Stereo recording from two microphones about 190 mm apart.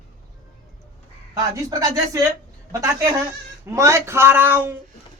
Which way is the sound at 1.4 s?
20° right (ahead or behind).